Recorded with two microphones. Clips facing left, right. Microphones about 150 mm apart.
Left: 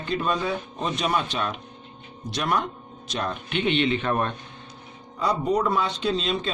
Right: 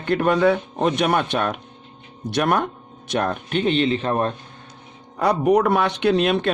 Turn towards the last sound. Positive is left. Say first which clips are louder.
# right 7 dB
turn(degrees=-65)  # may be behind; listen again after turning